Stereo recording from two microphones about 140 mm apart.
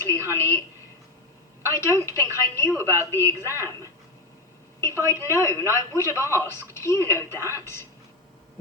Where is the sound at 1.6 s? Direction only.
20° left (ahead or behind).